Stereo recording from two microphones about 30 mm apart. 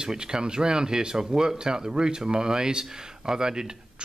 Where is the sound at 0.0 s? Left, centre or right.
Right.